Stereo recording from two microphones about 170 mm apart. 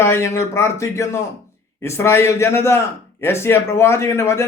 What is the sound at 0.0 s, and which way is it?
A man's voice, 15° left (ahead or behind).